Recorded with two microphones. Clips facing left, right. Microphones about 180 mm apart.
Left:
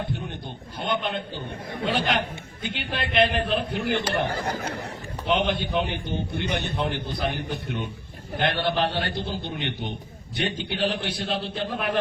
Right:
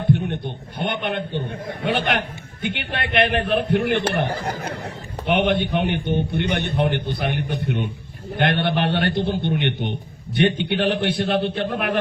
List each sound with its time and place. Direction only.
0.8 s a man's voice: 60° right (ahead or behind)